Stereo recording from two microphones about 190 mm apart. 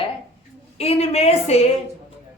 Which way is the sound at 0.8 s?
35° left (ahead or behind).